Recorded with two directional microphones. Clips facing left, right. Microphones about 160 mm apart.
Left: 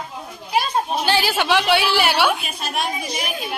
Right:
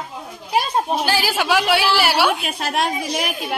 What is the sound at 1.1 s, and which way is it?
A woman's voice, 5° right (ahead or behind).